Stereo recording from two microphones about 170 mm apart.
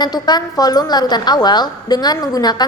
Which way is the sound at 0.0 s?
25° left (ahead or behind).